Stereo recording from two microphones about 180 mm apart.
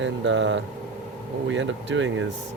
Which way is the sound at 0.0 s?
90° right.